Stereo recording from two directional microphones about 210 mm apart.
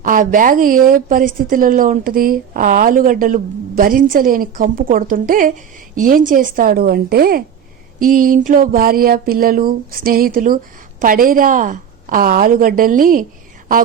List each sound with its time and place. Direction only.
0.0 s a woman's voice: 40° right (ahead or behind)
6.0 s a sound: 40° right (ahead or behind)
11.0 s a woman's voice: 40° right (ahead or behind)